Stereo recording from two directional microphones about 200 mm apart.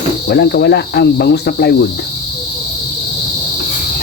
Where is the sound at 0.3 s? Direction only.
55° left (ahead or behind).